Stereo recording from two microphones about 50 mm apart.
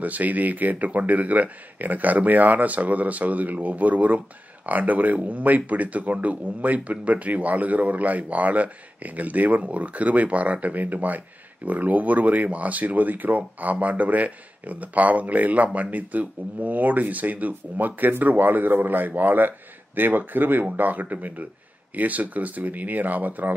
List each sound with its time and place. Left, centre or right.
0.0 s speech: right